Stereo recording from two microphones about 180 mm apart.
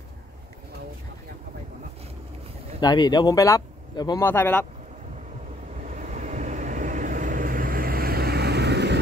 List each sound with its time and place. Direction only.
2.8 s speech: 20° left (ahead or behind)
4.2 s speech: 10° left (ahead or behind)
5.9 s vehicle: 45° right (ahead or behind); by 9.0 s 70° right (ahead or behind)